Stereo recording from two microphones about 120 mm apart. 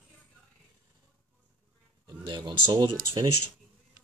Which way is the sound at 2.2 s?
40° right (ahead or behind).